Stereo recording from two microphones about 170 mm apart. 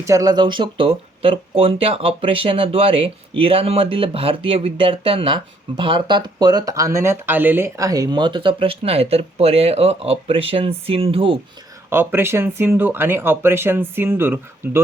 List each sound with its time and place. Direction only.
0.0 s speech: 20° right (ahead or behind)
11.9 s speech: 15° right (ahead or behind)